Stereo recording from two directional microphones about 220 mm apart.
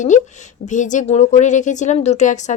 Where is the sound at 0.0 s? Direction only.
35° left (ahead or behind).